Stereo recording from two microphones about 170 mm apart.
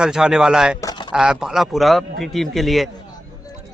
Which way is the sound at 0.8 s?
25° left (ahead or behind).